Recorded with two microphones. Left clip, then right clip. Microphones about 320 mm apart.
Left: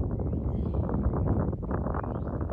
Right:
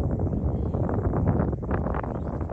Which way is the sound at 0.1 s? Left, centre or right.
Right.